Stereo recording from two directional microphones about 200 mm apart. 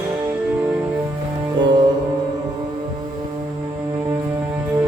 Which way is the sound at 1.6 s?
20° right (ahead or behind).